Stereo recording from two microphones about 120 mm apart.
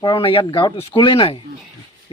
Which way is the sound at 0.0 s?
45° left (ahead or behind).